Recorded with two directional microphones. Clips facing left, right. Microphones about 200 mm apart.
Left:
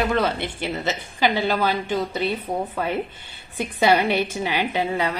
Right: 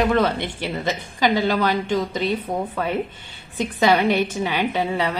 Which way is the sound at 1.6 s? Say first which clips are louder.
Right 2 dB; 10° left (ahead or behind).